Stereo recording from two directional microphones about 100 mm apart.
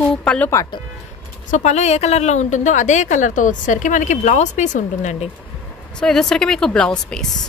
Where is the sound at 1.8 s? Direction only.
90° left.